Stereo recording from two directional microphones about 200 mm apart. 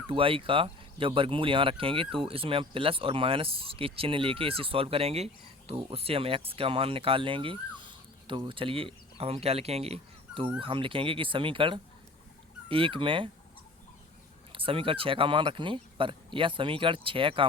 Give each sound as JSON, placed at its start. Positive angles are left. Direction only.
{"t": 0.1, "sound": "speech", "side_deg": -25}
{"t": 14.5, "sound": "speech", "side_deg": -25}